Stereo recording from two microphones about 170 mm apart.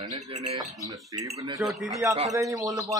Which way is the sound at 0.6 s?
20° right (ahead or behind).